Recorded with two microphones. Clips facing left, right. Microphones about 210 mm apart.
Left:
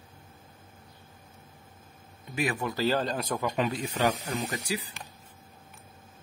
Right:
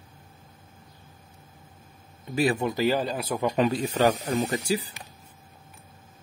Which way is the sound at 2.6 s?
15° right (ahead or behind).